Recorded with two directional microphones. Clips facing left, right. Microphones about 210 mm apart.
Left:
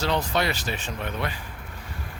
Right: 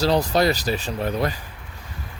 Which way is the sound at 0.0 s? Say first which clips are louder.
Right 6 dB; 35° right (ahead or behind).